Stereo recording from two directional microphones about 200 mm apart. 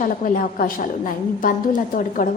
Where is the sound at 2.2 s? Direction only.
45° left (ahead or behind).